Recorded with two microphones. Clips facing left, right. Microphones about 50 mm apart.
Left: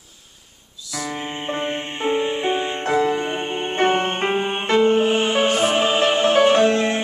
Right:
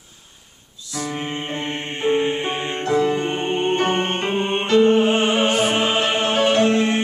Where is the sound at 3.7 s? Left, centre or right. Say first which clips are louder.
Left 5 dB; left.